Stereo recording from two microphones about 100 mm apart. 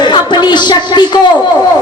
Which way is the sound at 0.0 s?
50° left (ahead or behind).